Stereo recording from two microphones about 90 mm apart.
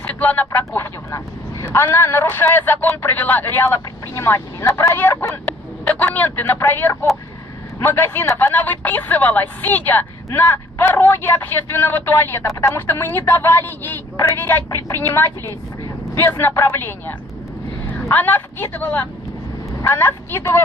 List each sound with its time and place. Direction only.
0.0 s speech: 15° left (ahead or behind)
5.8 s a woman's voice: 15° left (ahead or behind)